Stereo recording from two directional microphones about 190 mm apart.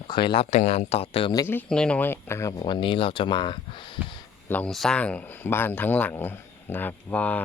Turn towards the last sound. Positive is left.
turn(degrees=10)  # may be behind; listen again after turning